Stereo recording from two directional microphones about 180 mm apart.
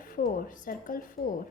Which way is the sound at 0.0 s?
50° left (ahead or behind).